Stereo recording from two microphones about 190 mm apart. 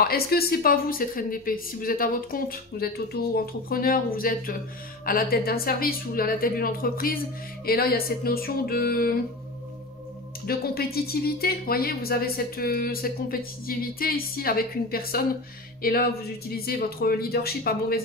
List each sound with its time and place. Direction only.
0.0 s a woman's voice: 55° left (ahead or behind)
10.4 s a woman's voice: 55° left (ahead or behind)